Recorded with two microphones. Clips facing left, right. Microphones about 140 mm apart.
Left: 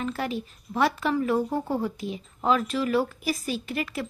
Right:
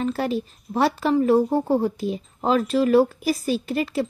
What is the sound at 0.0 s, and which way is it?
Speech, 35° right (ahead or behind).